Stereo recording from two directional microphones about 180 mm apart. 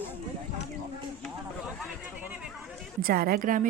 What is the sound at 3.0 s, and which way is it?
Speech, 55° right (ahead or behind).